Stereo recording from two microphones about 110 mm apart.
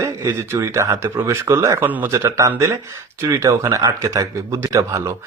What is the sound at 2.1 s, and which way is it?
Speech, 30° right (ahead or behind).